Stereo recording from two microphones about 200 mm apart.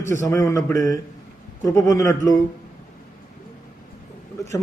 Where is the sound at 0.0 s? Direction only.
15° left (ahead or behind).